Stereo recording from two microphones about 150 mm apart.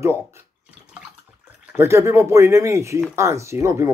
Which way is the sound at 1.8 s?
20° right (ahead or behind).